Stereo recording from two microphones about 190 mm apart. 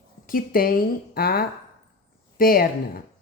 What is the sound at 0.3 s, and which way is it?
A woman's voice, 50° left (ahead or behind).